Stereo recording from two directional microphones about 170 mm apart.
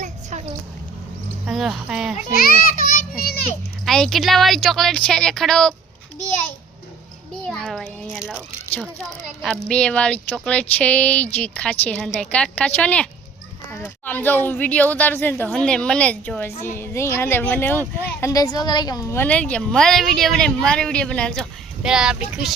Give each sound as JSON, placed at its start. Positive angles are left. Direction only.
{"t": 0.0, "sound": "a sound", "side_deg": -45}
{"t": 1.5, "sound": "a woman's voice", "side_deg": 0}
{"t": 2.3, "sound": "children playing", "side_deg": 55}
{"t": 3.8, "sound": "a woman's voice", "side_deg": 0}
{"t": 7.4, "sound": "a woman's voice", "side_deg": 0}